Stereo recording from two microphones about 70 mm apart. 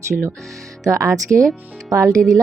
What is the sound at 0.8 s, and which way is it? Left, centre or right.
Speech, right.